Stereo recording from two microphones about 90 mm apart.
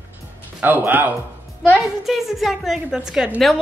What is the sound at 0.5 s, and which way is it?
Speech, 20° right (ahead or behind).